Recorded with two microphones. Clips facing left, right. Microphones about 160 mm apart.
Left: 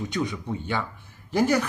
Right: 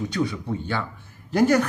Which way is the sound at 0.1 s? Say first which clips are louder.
Right 3 dB; 20° left (ahead or behind).